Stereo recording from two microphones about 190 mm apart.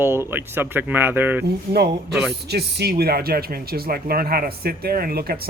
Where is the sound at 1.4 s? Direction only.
60° right (ahead or behind).